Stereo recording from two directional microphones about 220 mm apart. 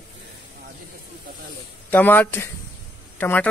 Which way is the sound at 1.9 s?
10° left (ahead or behind).